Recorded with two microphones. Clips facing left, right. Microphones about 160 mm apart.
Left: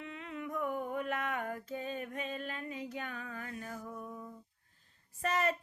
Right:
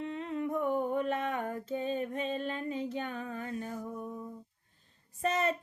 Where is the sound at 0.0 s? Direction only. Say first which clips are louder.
Right 8 dB; 35° right (ahead or behind).